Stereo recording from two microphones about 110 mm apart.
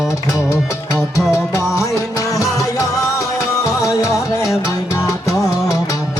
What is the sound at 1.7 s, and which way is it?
Music, 30° left (ahead or behind).